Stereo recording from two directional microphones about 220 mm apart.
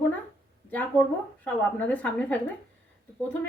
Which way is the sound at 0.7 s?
10° left (ahead or behind).